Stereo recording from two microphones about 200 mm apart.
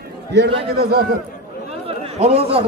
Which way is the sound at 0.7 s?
50° right (ahead or behind).